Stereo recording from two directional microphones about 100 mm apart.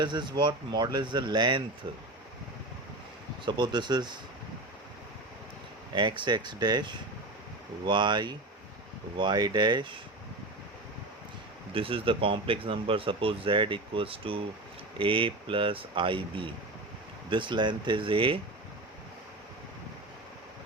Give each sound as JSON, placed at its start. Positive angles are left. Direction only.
{"t": 0.0, "sound": "speech", "side_deg": -50}
{"t": 3.4, "sound": "speech", "side_deg": -50}
{"t": 5.9, "sound": "speech", "side_deg": -50}
{"t": 11.7, "sound": "speech", "side_deg": -65}